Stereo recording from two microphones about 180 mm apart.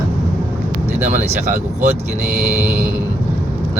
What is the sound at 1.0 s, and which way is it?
Speech, 40° right (ahead or behind).